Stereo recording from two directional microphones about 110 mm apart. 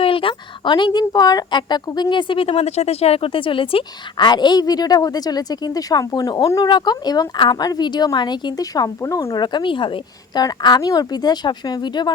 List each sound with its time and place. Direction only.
0.0 s speech: 55° left (ahead or behind)
4.3 s speech: 40° left (ahead or behind)